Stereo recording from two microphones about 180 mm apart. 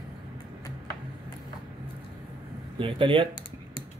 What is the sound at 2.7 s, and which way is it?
Speech, 30° right (ahead or behind).